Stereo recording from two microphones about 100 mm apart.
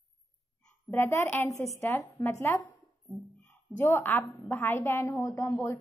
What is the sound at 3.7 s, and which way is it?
A woman's voice, 20° left (ahead or behind).